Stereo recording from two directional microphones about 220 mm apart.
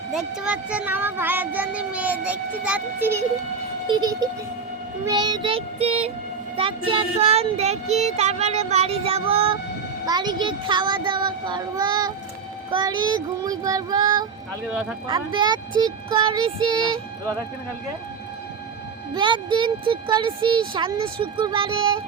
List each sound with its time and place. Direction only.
0.1 s speech: 5° right (ahead or behind)
14.7 s speech: 5° right (ahead or behind)
15.0 s speech: 20° right (ahead or behind)
19.1 s speech: 20° right (ahead or behind)